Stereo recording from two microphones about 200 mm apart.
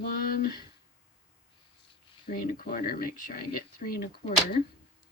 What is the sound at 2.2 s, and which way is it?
Speech, 45° left (ahead or behind).